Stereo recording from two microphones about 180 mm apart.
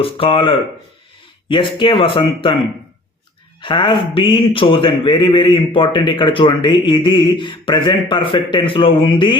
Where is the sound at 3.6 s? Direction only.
25° left (ahead or behind).